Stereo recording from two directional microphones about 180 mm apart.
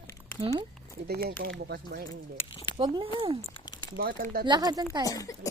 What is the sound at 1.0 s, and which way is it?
Speech, 60° right (ahead or behind).